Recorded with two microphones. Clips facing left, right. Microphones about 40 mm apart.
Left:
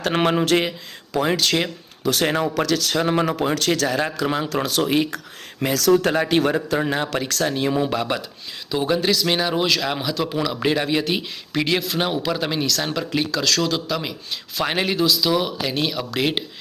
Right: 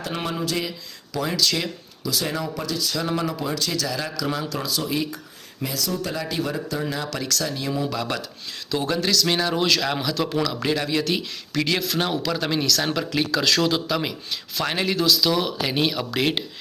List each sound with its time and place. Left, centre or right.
0.1 s speech: left
2.0 s speech: left
2.6 s speech: left
3.0 s speech: left
8.7 s a man's voice: centre
14.7 s speech: left
14.9 s a man's voice: centre
15.6 s speech: centre